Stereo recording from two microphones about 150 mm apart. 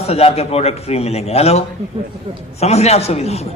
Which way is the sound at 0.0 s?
40° left (ahead or behind).